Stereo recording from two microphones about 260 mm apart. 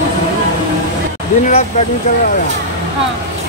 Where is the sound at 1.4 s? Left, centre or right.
Left.